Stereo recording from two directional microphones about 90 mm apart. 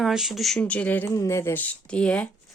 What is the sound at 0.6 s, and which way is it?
Speech, 15° left (ahead or behind).